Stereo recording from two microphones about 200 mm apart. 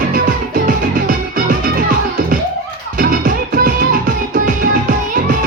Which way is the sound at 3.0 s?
45° right (ahead or behind).